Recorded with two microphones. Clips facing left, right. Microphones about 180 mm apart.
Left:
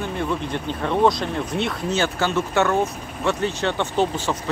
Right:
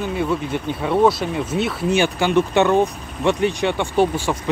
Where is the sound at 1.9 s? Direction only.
15° right (ahead or behind).